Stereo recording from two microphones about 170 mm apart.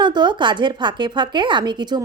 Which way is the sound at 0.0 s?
25° right (ahead or behind).